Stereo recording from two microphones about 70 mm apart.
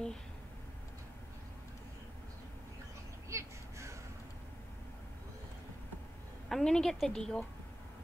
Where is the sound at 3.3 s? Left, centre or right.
Right.